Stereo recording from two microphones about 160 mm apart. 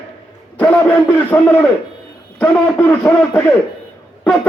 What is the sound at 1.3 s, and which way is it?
A man's voice, 10° left (ahead or behind).